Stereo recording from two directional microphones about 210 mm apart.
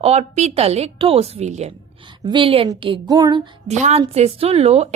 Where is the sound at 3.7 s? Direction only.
35° right (ahead or behind).